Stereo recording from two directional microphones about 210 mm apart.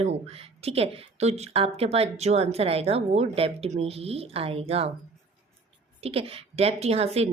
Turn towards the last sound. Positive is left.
turn(degrees=-30)  # may be behind; listen again after turning